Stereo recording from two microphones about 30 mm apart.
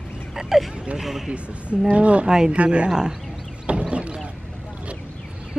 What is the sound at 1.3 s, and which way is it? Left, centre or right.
Speech, right.